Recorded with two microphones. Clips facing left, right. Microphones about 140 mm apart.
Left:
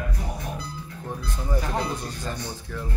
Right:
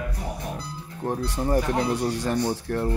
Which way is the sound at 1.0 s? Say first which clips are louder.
Right 8 dB; 75° right (ahead or behind).